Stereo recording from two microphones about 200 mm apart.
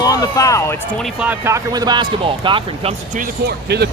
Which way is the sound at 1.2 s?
10° right (ahead or behind).